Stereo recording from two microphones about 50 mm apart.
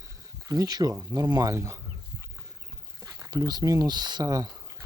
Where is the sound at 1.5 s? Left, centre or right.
Right.